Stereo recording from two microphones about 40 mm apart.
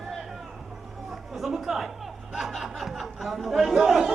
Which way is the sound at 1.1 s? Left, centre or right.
Centre.